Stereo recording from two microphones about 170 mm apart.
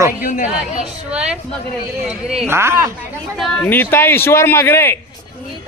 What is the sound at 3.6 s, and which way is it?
Speech, 10° left (ahead or behind).